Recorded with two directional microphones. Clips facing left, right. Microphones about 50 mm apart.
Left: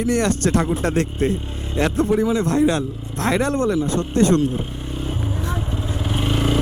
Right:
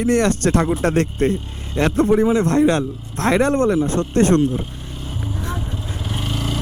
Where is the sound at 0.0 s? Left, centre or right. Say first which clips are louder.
Right 2 dB; right.